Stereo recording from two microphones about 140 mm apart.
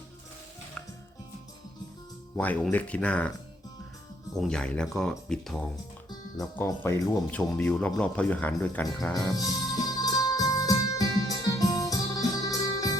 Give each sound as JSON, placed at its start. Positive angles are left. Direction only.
{"t": 2.3, "sound": "a man's voice", "side_deg": 10}
{"t": 4.4, "sound": "speech", "side_deg": 5}
{"t": 6.1, "sound": "music", "side_deg": 25}
{"t": 6.7, "sound": "a man's voice", "side_deg": 20}
{"t": 9.3, "sound": "music", "side_deg": 25}